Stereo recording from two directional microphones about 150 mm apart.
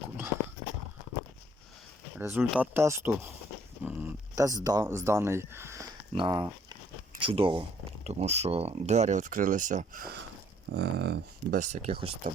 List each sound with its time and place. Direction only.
2.1 s speech: 15° right (ahead or behind)
3.8 s a sound: 10° right (ahead or behind)
4.4 s speech: 25° right (ahead or behind)
6.1 s speech: 30° right (ahead or behind); by 10.1 s 60° right (ahead or behind)
10.8 s speech: 90° right
11.6 s speech: 50° right (ahead or behind)